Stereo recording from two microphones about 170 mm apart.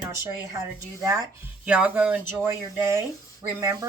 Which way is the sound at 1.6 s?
5° right (ahead or behind).